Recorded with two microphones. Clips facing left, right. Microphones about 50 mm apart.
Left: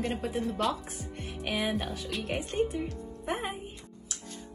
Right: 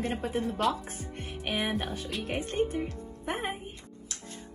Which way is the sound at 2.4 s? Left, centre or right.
Right.